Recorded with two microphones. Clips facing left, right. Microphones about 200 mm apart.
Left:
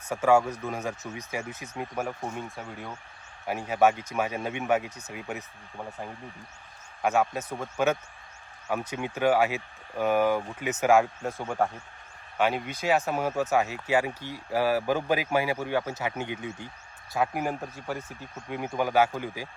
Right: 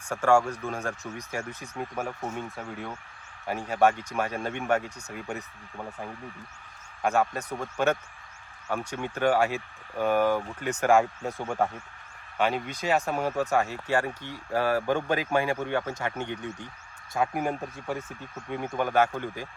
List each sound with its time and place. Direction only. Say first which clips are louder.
0.1 s a man's voice: even; 5° left (ahead or behind)
7.0 s a man's voice: even; centre (ahead or behind)